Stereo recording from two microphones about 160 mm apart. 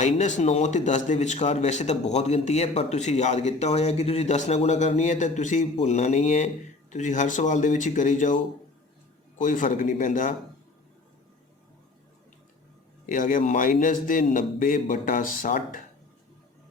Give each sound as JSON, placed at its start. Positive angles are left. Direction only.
{"t": 0.0, "sound": "a man's voice", "side_deg": 45}
{"t": 9.4, "sound": "a man's voice", "side_deg": 55}
{"t": 13.1, "sound": "a man's voice", "side_deg": 55}